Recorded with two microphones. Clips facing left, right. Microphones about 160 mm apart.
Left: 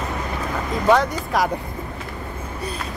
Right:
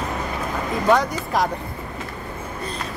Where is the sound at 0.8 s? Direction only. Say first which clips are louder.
Left 2 dB; centre (ahead or behind).